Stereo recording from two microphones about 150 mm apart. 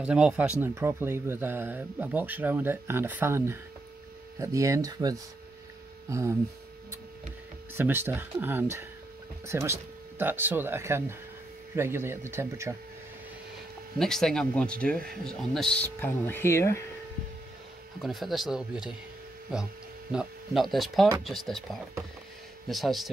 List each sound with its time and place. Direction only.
0.0 s speech: 5° right (ahead or behind)
7.7 s speech: 15° right (ahead or behind)
13.9 s speech: 5° left (ahead or behind)
17.9 s speech: centre (ahead or behind)
20.1 s speech: 5° right (ahead or behind)